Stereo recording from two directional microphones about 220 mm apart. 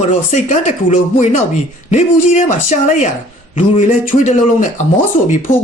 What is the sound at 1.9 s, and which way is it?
Speech, 30° left (ahead or behind).